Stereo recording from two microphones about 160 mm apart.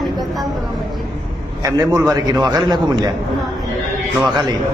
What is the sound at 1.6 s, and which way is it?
A man's voice, 20° right (ahead or behind).